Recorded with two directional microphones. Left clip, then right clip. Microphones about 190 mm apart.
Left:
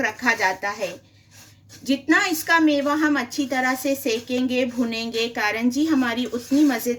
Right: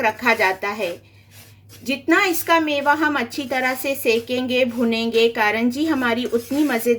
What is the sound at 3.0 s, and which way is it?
A woman's voice, 50° right (ahead or behind).